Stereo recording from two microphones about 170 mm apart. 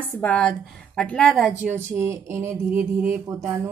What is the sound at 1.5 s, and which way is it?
A woman's voice, 10° right (ahead or behind).